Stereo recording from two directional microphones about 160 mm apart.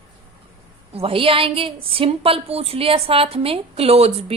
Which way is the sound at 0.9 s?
35° right (ahead or behind).